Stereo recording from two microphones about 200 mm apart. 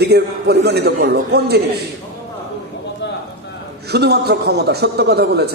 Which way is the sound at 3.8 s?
55° right (ahead or behind).